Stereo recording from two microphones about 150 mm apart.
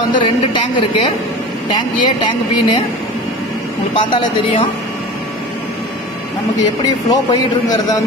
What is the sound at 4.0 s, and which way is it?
Speech, 35° left (ahead or behind).